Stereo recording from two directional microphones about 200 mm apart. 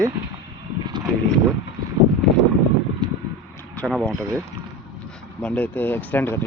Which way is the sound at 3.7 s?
5° left (ahead or behind).